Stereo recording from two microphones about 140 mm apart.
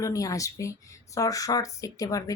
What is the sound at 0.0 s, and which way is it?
Speech, 25° left (ahead or behind).